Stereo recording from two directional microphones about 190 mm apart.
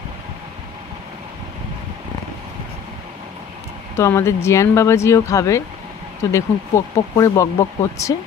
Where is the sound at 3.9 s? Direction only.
15° left (ahead or behind).